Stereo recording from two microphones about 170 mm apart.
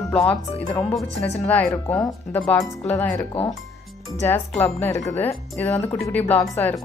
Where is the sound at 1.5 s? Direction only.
10° left (ahead or behind).